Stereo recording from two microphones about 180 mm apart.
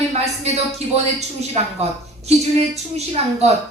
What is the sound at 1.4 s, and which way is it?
Speech, 35° right (ahead or behind).